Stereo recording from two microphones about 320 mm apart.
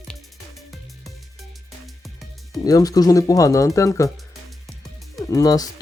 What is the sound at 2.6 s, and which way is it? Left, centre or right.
Speech, centre.